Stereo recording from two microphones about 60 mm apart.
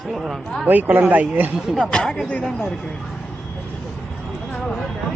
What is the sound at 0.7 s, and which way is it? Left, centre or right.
Speech, right.